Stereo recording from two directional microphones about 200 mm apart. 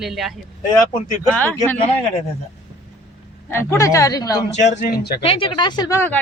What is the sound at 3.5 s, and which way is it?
Speech, 10° left (ahead or behind).